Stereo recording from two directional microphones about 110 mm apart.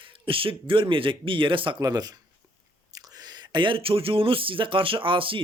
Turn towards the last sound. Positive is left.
turn(degrees=-50)  # may be behind; listen again after turning